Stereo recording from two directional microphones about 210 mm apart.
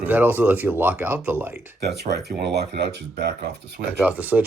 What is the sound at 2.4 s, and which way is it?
Speech, 55° right (ahead or behind).